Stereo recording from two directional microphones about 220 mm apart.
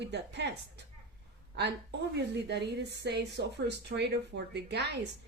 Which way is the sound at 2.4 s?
50° right (ahead or behind).